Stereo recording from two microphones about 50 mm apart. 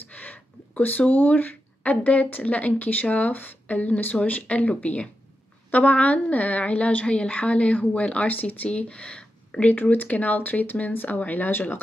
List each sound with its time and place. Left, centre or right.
0.0 s a woman's voice: left
8.6 s speech: left
9.7 s speech: left